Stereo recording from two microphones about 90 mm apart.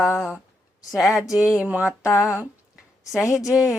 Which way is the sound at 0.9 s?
Centre (ahead or behind).